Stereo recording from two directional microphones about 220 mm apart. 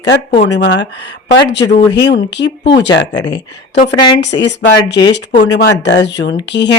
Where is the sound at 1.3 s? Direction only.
50° left (ahead or behind).